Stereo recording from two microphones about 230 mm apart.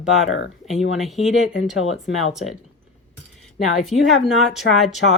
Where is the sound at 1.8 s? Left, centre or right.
Left.